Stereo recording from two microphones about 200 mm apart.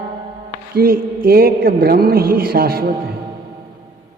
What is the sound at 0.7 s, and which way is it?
A man's voice, 50° right (ahead or behind).